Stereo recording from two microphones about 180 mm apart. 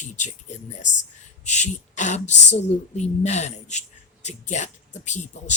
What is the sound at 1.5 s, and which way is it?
A woman's voice, 40° left (ahead or behind).